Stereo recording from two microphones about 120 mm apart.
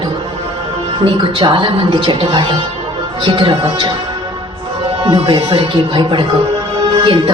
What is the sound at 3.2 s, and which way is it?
Speech, 45° right (ahead or behind).